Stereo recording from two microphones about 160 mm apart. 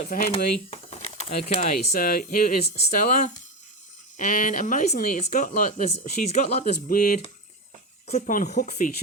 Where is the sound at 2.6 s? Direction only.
40° left (ahead or behind).